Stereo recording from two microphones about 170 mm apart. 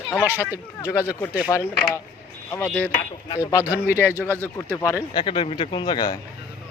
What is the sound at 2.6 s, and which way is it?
Speech, 5° left (ahead or behind).